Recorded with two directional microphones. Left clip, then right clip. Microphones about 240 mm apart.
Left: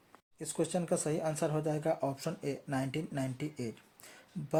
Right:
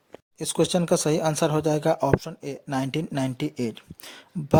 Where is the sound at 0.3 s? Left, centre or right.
Right.